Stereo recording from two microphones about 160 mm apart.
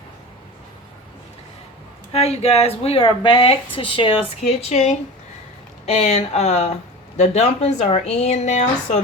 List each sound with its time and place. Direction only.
2.1 s speech: 40° left (ahead or behind)
4.7 s speech: 45° left (ahead or behind)